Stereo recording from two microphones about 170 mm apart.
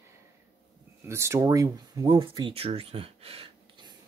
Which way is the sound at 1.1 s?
15° right (ahead or behind).